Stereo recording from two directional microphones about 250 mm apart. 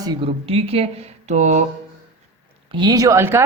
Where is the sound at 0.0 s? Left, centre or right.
Right.